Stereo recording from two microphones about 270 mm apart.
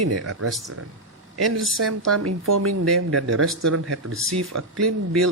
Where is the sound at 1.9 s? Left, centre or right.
Right.